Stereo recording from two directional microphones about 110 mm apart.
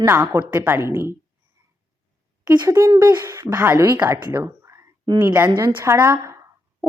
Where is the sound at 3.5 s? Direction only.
20° right (ahead or behind).